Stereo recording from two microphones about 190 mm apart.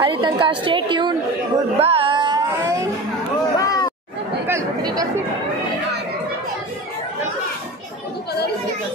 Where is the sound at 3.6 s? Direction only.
20° left (ahead or behind).